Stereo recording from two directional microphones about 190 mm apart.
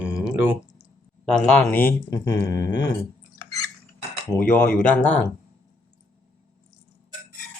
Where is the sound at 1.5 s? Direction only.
5° left (ahead or behind).